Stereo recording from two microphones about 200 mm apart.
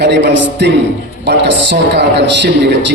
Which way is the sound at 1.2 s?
60° right (ahead or behind).